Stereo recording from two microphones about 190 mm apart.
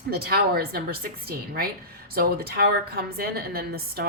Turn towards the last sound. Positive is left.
turn(degrees=-55)  # may be behind; listen again after turning